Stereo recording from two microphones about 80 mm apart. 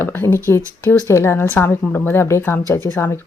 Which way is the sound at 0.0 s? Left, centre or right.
Left.